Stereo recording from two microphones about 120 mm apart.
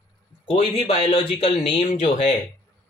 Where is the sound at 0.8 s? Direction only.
50° left (ahead or behind).